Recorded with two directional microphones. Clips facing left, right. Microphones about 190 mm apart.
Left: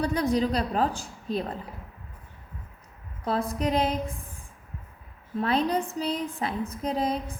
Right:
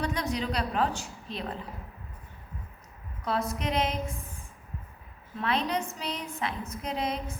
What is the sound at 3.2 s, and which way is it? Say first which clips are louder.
Speech: left 3 dB; 35° left (ahead or behind).